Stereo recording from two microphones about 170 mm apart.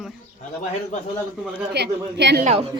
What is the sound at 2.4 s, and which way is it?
Speech, 40° right (ahead or behind).